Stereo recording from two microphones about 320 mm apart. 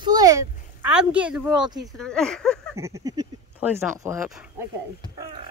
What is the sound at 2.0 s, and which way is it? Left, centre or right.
Speech, centre.